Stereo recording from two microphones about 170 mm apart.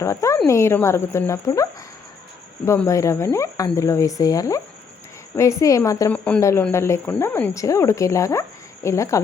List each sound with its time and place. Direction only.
0.0 s speech: 15° left (ahead or behind)
2.6 s a woman's voice: 15° left (ahead or behind)
6.1 s speech: 10° left (ahead or behind)